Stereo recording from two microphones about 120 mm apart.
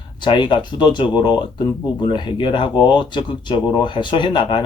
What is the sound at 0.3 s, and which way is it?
Speech, 40° left (ahead or behind).